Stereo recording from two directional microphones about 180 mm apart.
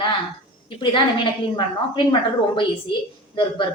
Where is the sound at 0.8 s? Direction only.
25° left (ahead or behind).